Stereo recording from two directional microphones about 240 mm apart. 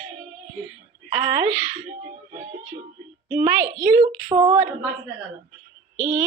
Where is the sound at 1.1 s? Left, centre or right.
Right.